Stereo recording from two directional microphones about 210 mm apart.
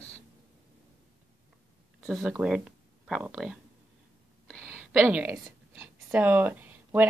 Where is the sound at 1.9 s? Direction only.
Centre (ahead or behind).